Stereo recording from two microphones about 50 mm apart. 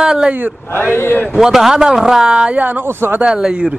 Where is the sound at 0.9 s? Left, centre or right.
Left.